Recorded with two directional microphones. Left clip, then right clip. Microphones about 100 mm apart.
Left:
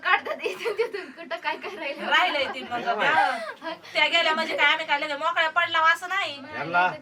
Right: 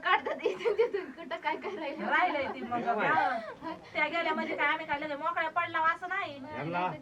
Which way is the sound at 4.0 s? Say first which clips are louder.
Left 9 dB; 55° left (ahead or behind).